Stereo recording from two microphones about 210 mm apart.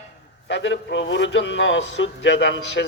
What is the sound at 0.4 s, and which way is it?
Speech, 60° left (ahead or behind).